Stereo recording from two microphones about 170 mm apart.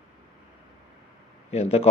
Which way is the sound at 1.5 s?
40° left (ahead or behind).